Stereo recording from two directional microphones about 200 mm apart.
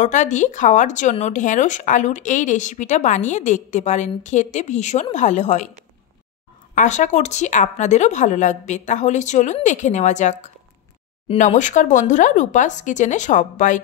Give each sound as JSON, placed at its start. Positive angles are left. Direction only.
{"t": 0.0, "sound": "speech", "side_deg": 35}
{"t": 6.7, "sound": "speech", "side_deg": 40}